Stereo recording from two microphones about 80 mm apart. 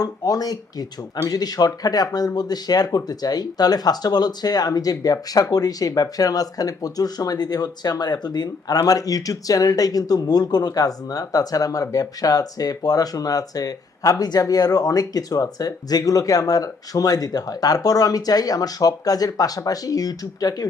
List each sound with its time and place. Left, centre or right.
0.0 s speech: left